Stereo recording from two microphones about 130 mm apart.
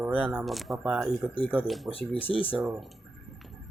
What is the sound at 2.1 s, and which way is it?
Speech, 45° left (ahead or behind).